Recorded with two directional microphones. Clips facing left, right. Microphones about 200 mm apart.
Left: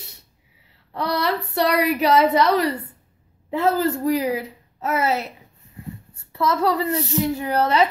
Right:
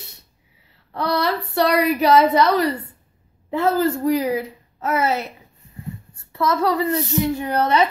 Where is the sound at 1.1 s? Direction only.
40° right (ahead or behind).